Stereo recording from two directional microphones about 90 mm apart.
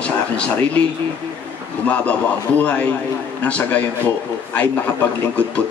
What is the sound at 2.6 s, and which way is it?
Speech, 15° left (ahead or behind).